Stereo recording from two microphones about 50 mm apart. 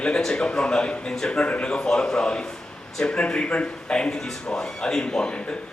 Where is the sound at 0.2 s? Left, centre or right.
Centre.